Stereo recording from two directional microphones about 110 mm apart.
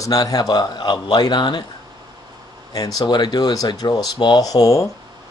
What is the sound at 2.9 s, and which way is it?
Speech, 40° left (ahead or behind).